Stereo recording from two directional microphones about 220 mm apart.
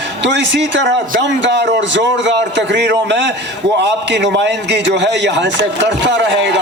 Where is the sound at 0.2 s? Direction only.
55° right (ahead or behind).